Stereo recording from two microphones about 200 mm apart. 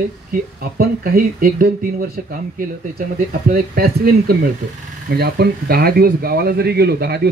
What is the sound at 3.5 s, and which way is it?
A man's voice, 50° right (ahead or behind).